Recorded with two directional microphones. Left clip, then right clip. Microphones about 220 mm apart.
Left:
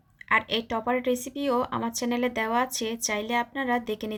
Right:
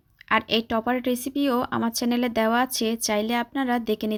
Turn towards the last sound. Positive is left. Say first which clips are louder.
# right 3 dB
turn(degrees=-40)  # may be behind; listen again after turning